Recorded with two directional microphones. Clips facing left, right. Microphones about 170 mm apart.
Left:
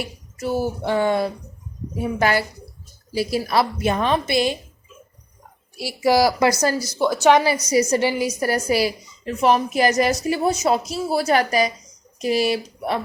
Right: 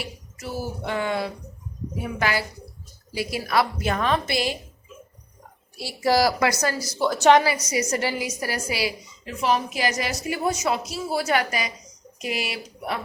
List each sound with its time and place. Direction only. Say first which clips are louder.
0.9 s a woman's voice: left 6 dB; 30° left (ahead or behind)
6.0 s a woman's voice: left 3 dB; 15° left (ahead or behind)
6.4 s a woman's voice: left 5 dB; 30° left (ahead or behind)
7.0 s a woman's voice: left 1 dB; 10° left (ahead or behind)
7.4 s a woman's voice: left 6 dB; 35° left (ahead or behind)
8.4 s a woman's voice: left 7 dB; 45° left (ahead or behind)